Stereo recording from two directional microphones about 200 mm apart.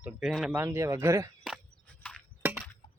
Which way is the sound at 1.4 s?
Centre (ahead or behind).